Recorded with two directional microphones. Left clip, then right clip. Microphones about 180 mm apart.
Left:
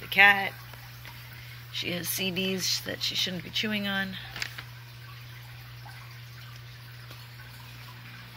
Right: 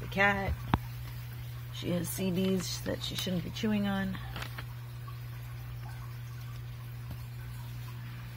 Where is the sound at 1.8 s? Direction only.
10° right (ahead or behind).